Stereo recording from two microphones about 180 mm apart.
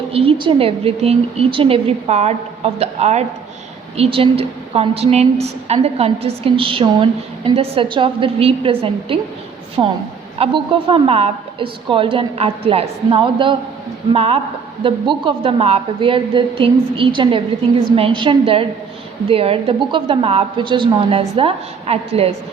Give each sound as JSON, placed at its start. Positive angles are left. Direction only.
{"t": 0.1, "sound": "a woman's voice", "side_deg": -30}